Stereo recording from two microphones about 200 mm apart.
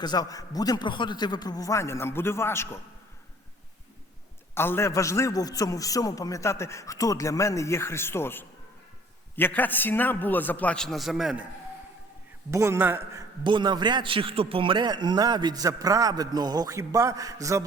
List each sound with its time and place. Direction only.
0.0 s a man's voice: 20° left (ahead or behind)
4.5 s a man's voice: 10° left (ahead or behind)
12.5 s a man's voice: 15° right (ahead or behind)
13.4 s a man's voice: 25° right (ahead or behind)